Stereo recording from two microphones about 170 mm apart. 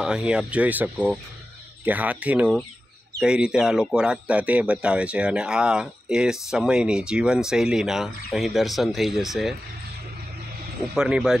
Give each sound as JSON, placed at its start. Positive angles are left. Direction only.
{"t": 0.0, "sound": "speech", "side_deg": -5}
{"t": 11.0, "sound": "speech", "side_deg": -5}